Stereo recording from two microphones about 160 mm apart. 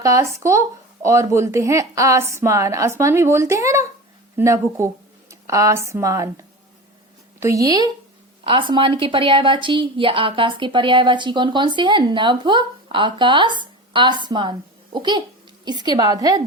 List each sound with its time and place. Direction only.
0.0 s a woman's voice: 20° right (ahead or behind)